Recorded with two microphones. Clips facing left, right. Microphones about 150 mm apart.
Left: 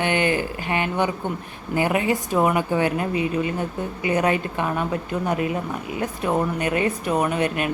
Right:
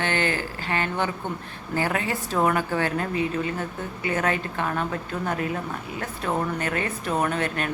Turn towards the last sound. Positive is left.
turn(degrees=15)  # may be behind; listen again after turning